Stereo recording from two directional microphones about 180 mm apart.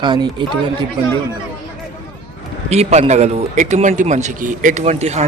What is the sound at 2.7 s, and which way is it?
A man's voice, 35° right (ahead or behind).